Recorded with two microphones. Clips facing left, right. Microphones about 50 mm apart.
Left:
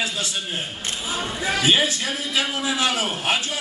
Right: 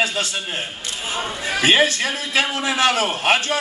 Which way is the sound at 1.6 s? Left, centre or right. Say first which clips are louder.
Right 5 dB; right.